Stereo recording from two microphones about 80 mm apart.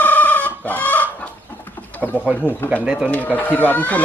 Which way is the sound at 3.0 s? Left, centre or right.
Left.